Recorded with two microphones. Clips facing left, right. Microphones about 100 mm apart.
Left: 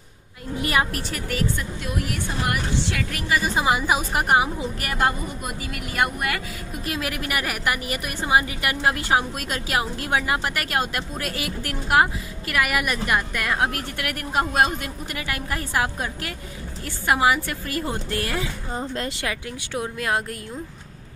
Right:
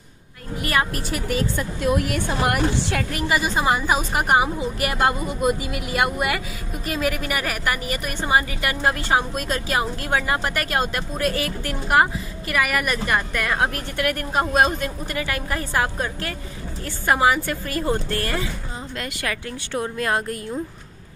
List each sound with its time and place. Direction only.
0.6 s a sound: 15° left (ahead or behind)
1.8 s a woman's voice: 55° right (ahead or behind)
3.1 s a woman's voice: 20° right (ahead or behind)
3.5 s a woman's voice: 5° left (ahead or behind)
5.0 s speech: 15° right (ahead or behind)
6.9 s a woman's voice: centre (ahead or behind)
18.8 s speech: 30° left (ahead or behind)
19.7 s a woman's voice: 5° left (ahead or behind)